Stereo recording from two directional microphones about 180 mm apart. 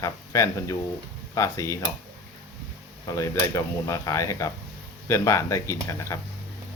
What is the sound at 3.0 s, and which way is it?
Speech, 20° left (ahead or behind).